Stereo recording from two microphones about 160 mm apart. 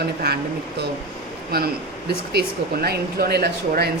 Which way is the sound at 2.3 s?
75° right (ahead or behind).